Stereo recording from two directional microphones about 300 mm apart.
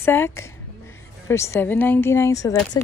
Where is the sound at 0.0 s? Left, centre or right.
Centre.